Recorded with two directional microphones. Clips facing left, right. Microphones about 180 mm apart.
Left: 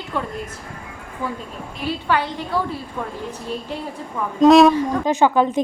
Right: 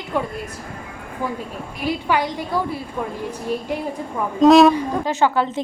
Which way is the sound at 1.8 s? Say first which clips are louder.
Right 1 dB; 10° right (ahead or behind).